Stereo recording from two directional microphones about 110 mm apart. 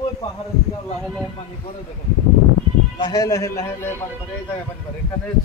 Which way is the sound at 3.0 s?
35° left (ahead or behind).